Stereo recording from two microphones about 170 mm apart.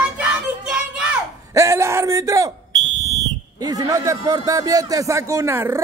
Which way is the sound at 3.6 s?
20° right (ahead or behind).